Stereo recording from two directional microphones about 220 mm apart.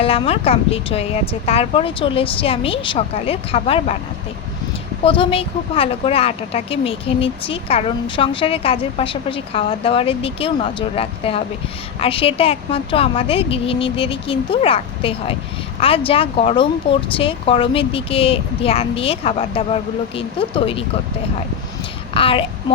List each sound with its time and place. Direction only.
0.0 s a woman's voice: 25° left (ahead or behind)
5.0 s a woman's voice: 25° left (ahead or behind)
22.1 s a woman's voice: 25° left (ahead or behind)